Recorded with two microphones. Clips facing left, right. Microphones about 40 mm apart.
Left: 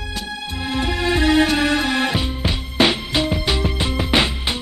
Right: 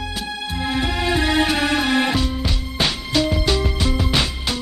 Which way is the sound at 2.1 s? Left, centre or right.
Left.